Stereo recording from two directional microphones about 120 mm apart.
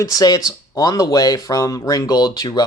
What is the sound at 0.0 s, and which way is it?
Speech, 30° left (ahead or behind).